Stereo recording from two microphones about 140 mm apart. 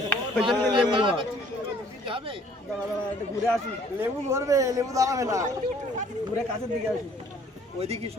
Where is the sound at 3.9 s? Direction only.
20° right (ahead or behind).